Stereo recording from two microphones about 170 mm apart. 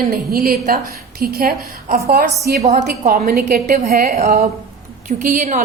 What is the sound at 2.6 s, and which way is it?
Speech, 40° right (ahead or behind).